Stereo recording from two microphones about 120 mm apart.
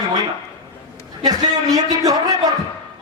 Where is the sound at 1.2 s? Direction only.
30° right (ahead or behind).